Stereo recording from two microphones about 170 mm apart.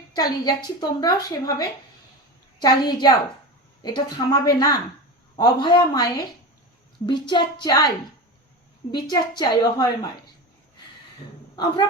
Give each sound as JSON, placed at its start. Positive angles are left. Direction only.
{"t": 0.1, "sound": "a woman's voice", "side_deg": 25}
{"t": 11.5, "sound": "a woman's voice", "side_deg": 25}